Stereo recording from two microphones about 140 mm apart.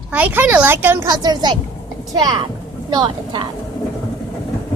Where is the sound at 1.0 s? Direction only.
30° right (ahead or behind).